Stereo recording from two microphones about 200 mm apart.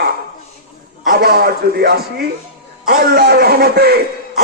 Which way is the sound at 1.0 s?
50° right (ahead or behind).